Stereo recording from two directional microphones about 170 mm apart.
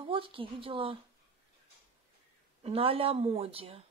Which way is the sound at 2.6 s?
35° right (ahead or behind).